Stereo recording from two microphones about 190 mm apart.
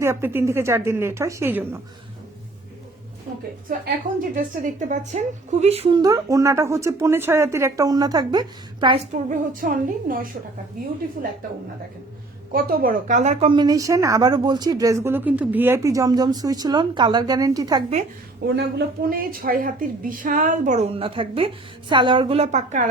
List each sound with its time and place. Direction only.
0.0 s speech: 15° right (ahead or behind)
3.7 s a woman's voice: 45° right (ahead or behind); by 6.0 s 30° right (ahead or behind)
6.0 s speech: 20° right (ahead or behind)
9.3 s a woman's voice: 45° right (ahead or behind)
11.2 s a woman's voice: 45° right (ahead or behind)
12.5 s a woman's voice: 50° right (ahead or behind); by 17.8 s 20° right (ahead or behind)
18.4 s a woman's voice: 55° right (ahead or behind); by 22.9 s 40° right (ahead or behind)